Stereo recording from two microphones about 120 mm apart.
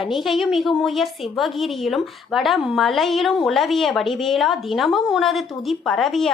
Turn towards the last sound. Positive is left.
turn(degrees=0)  # may be behind; listen again after turning